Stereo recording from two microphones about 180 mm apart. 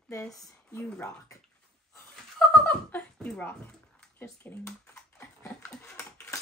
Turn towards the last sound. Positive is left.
turn(degrees=15)  # may be behind; listen again after turning